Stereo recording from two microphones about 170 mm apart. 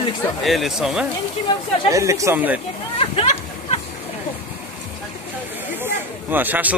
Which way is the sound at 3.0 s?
35° left (ahead or behind).